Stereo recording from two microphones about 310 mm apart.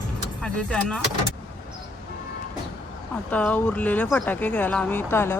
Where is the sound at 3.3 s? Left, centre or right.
Centre.